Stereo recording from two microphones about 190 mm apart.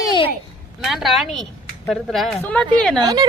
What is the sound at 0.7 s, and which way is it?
A woman's voice, centre (ahead or behind).